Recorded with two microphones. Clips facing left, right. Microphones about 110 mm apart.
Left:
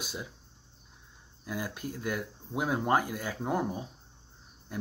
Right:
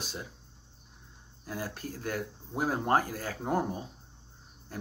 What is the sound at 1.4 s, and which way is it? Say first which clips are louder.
Speech: left 1 dB; 35° right (ahead or behind).